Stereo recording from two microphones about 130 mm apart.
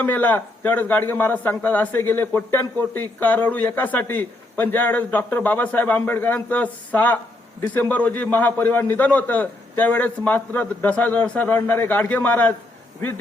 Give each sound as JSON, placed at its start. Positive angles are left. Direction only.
{"t": 0.0, "sound": "a man's voice", "side_deg": 15}